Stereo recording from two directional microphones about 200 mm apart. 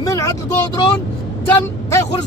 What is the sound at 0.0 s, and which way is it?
Vehicle, 15° left (ahead or behind).